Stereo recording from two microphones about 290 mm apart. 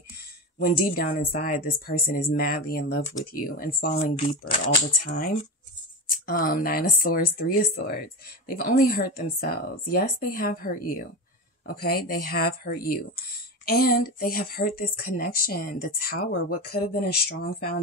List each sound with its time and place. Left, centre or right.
0.7 s speech: left